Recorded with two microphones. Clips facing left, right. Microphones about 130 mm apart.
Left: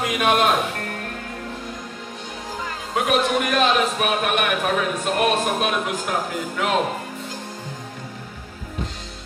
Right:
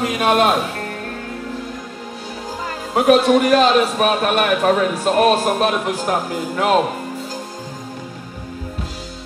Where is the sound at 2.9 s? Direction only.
35° right (ahead or behind).